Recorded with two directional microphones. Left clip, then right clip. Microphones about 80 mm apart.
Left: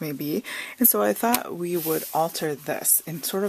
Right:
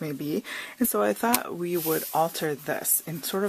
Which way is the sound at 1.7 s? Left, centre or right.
Centre.